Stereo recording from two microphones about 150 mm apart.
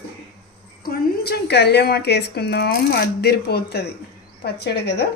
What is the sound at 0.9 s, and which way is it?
A woman's voice, 90° left.